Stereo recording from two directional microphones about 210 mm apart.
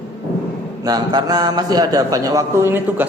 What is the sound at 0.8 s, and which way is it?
A man's voice, 20° right (ahead or behind).